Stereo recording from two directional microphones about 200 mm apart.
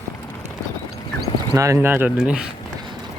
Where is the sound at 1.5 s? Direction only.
15° right (ahead or behind).